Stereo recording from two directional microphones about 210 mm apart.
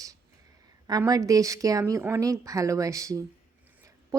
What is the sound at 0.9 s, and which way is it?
A woman's voice, 20° right (ahead or behind).